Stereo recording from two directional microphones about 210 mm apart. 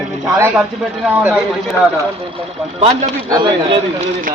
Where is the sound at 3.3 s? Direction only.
25° right (ahead or behind).